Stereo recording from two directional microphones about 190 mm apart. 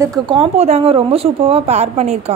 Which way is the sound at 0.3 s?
30° right (ahead or behind).